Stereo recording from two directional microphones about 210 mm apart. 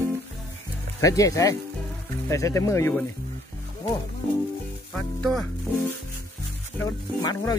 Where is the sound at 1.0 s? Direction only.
15° left (ahead or behind).